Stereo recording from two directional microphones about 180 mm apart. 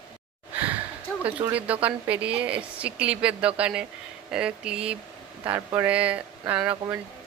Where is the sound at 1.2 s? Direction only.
10° right (ahead or behind).